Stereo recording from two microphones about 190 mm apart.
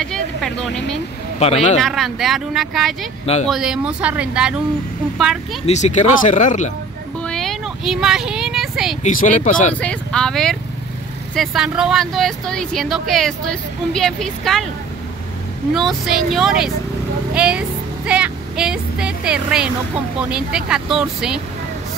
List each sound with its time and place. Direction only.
0.0 s speech: 5° left (ahead or behind)
1.4 s speech: 35° left (ahead or behind)
1.8 s speech: centre (ahead or behind)
5.7 s speech: 35° left (ahead or behind)
7.2 s a sound: centre (ahead or behind)
9.0 s speech: 40° left (ahead or behind)
9.8 s speech: 5° left (ahead or behind)
15.7 s speech: centre (ahead or behind)
17.3 s vehicle: 5° right (ahead or behind)
20.2 s speech: 5° right (ahead or behind)